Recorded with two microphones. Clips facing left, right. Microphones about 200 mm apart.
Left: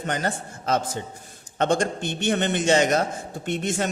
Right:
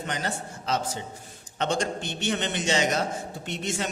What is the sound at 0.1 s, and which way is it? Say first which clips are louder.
A man's voice: left 6 dB; 50° left (ahead or behind).